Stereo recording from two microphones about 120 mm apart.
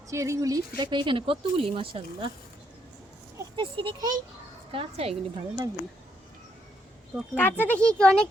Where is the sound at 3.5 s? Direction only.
45° right (ahead or behind).